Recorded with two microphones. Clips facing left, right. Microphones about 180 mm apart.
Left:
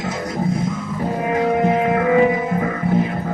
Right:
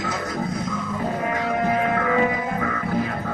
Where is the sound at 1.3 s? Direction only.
25° left (ahead or behind).